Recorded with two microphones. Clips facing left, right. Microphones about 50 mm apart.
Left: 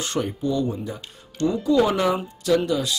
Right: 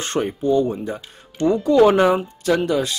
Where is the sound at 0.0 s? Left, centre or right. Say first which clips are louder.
Right 4 dB; right.